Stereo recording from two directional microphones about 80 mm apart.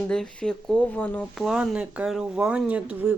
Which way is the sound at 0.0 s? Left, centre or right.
Centre.